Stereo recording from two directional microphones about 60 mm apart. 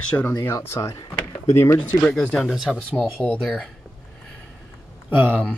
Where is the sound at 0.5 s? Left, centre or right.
Left.